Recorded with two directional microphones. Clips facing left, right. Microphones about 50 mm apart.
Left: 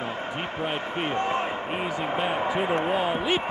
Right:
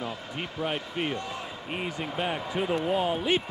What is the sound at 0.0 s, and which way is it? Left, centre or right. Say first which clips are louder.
Basketball bounce: left 4 dB; left.